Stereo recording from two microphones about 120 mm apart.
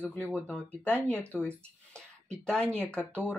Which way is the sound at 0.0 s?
10° left (ahead or behind).